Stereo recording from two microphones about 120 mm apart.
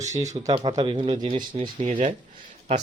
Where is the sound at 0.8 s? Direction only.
45° right (ahead or behind).